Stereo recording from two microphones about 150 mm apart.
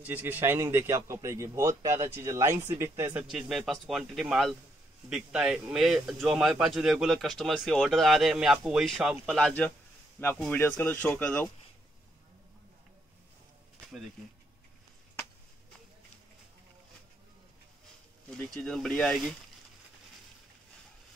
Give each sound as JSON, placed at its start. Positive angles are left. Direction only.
{"t": 0.0, "sound": "a man's voice", "side_deg": -10}
{"t": 3.3, "sound": "speech", "side_deg": 0}
{"t": 18.3, "sound": "speech", "side_deg": 5}